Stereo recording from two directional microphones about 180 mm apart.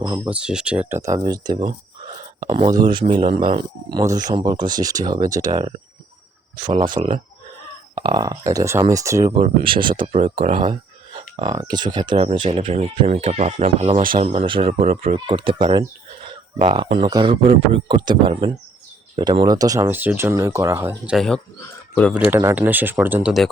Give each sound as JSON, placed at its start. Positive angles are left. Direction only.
{"t": 0.3, "sound": "speech", "side_deg": -5}
{"t": 6.8, "sound": "speech", "side_deg": -25}
{"t": 9.4, "sound": "speech", "side_deg": -30}
{"t": 10.6, "sound": "a sound", "side_deg": -30}
{"t": 11.5, "sound": "speech", "side_deg": -25}
{"t": 21.1, "sound": "speech", "side_deg": 5}
{"t": 22.1, "sound": "speech", "side_deg": -10}